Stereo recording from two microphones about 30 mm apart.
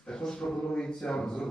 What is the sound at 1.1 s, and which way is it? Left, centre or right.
Speech, left.